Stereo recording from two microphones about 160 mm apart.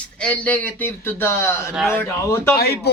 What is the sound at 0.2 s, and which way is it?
A man's voice, 10° left (ahead or behind).